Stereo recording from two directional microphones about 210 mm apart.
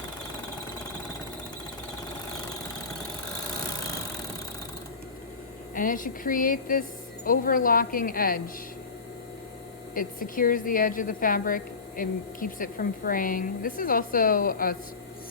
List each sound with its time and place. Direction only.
3.1 s engine: 20° left (ahead or behind)
5.7 s a woman's voice: 40° left (ahead or behind)
9.9 s a woman's voice: 40° left (ahead or behind)